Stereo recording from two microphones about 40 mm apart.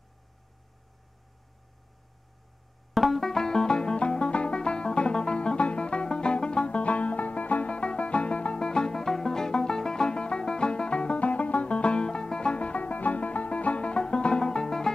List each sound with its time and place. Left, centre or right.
2.9 s music: centre